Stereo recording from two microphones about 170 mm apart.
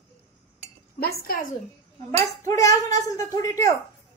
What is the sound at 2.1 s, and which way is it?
A woman's voice, 20° left (ahead or behind).